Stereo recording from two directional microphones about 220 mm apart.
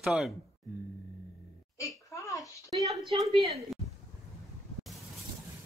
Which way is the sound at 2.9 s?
20° right (ahead or behind).